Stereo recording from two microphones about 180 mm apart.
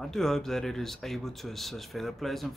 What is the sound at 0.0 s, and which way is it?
Speech, centre (ahead or behind).